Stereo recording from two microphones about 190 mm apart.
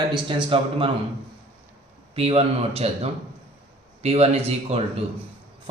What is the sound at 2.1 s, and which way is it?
A man's voice, 30° right (ahead or behind).